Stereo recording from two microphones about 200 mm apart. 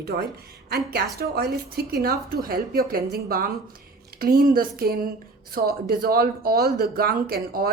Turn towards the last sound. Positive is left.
turn(degrees=-45)  # may be behind; listen again after turning